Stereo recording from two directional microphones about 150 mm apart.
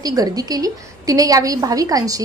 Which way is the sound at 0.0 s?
25° right (ahead or behind).